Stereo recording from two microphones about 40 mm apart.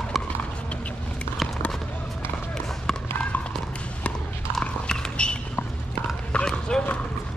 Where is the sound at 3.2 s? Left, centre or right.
Left.